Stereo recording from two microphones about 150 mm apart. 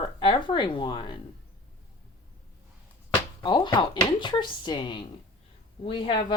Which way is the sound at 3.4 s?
30° left (ahead or behind).